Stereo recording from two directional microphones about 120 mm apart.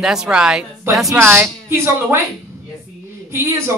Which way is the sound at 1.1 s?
20° right (ahead or behind).